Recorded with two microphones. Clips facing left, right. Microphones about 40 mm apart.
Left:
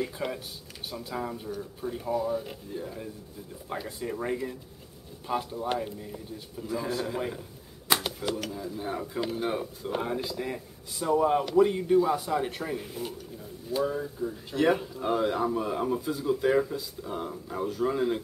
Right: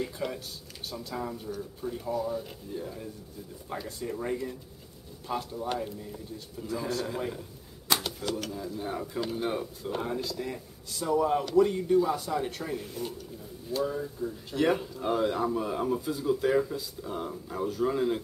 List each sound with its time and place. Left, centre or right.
0.0 s speech: centre